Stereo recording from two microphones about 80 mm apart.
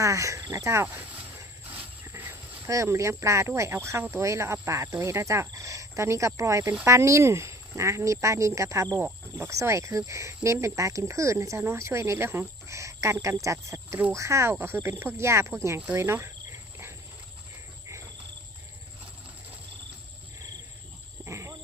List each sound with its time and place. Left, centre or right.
0.0 s cricket: right
0.5 s speech: right
0.9 s a sound: centre
1.6 s insect: right
2.0 s livestock: right
2.6 s speech: right
15.9 s cricket: right
21.2 s a sound: right